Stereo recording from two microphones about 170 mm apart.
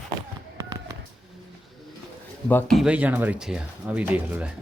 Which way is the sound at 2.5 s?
10° left (ahead or behind).